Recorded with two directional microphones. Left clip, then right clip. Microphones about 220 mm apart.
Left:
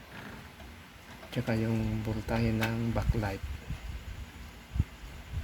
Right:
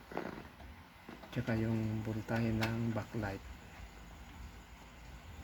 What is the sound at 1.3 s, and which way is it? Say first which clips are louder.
Speech: left 5 dB; 5° left (ahead or behind).